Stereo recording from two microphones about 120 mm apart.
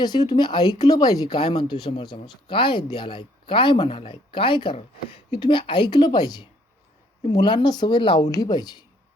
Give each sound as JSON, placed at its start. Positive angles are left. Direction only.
{"t": 0.0, "sound": "speech", "side_deg": 35}